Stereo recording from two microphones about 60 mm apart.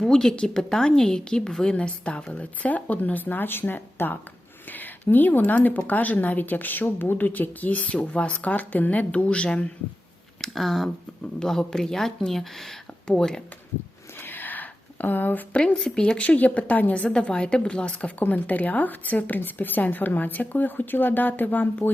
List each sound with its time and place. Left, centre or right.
0.0 s a woman's voice: centre
10.4 s a woman's voice: centre
14.2 s a sound: left
15.5 s a woman's voice: centre